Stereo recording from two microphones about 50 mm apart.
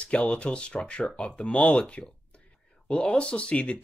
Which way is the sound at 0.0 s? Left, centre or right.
Left.